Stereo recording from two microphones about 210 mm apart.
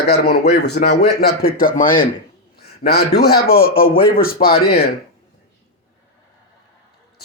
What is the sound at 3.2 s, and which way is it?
A man's voice, 45° left (ahead or behind).